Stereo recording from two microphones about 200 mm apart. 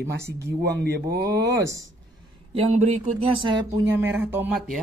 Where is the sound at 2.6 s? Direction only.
35° right (ahead or behind).